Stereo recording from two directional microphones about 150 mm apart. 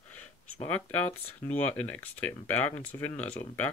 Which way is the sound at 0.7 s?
10° left (ahead or behind).